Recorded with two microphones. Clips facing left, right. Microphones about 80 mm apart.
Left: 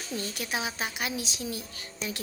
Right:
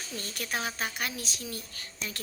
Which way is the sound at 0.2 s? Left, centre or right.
Centre.